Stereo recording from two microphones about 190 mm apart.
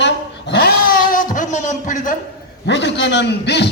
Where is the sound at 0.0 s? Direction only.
60° left (ahead or behind); by 2.1 s 40° left (ahead or behind).